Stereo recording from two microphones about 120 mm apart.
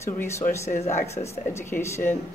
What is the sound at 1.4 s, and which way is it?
Speech, 20° left (ahead or behind).